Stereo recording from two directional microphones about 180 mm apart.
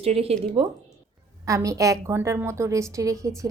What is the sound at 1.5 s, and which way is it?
A woman's voice, 15° right (ahead or behind).